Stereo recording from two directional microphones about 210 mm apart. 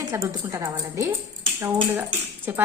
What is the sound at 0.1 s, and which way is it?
Speech, 15° right (ahead or behind).